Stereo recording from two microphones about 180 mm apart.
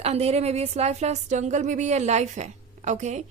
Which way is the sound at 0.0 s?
35° right (ahead or behind).